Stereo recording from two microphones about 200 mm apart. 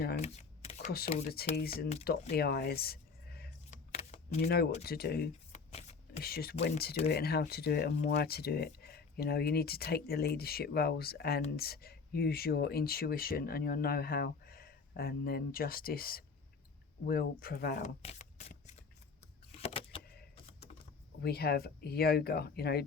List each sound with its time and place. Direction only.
0.9 s speech: 50° left (ahead or behind)
2.0 s speech: 35° left (ahead or behind)
2.3 s a sound: 50° left (ahead or behind)
3.7 s a sound: 35° left (ahead or behind)
4.4 s speech: 50° left (ahead or behind)
5.5 s shuffling cards: 35° left (ahead or behind)
6.2 s speech: 50° left (ahead or behind)
17.8 s shuffling cards: 35° left (ahead or behind)
19.5 s a sound: 30° left (ahead or behind)
21.2 s speech: 50° left (ahead or behind)